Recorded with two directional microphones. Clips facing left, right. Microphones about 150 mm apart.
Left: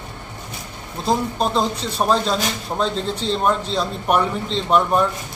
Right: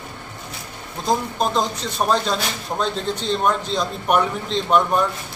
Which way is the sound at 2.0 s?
Centre (ahead or behind).